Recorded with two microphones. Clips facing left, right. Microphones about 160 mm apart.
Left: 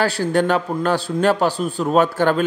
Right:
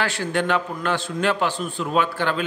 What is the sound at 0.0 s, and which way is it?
A man's voice, 40° left (ahead or behind).